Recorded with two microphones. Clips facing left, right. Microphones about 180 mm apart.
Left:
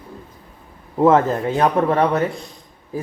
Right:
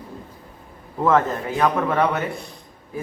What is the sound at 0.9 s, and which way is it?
A man's voice, 30° left (ahead or behind).